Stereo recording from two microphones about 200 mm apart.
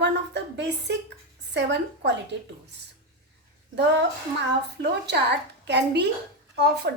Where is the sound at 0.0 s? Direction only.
60° right (ahead or behind).